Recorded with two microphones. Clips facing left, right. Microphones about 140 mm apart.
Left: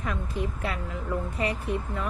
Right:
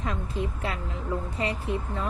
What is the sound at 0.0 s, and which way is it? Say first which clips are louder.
Speech: even; 25° right (ahead or behind).